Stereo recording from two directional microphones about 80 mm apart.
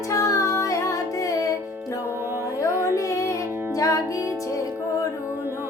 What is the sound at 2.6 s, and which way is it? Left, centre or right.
Music, left.